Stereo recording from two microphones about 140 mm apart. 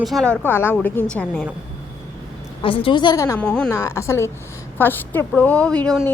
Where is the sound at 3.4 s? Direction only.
5° left (ahead or behind).